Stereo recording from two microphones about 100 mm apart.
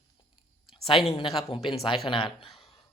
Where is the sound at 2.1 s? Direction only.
60° left (ahead or behind).